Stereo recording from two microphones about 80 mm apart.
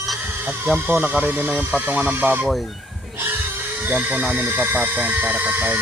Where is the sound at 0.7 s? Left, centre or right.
Right.